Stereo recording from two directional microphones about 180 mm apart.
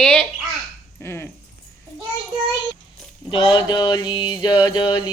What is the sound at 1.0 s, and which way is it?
Dog, 15° left (ahead or behind).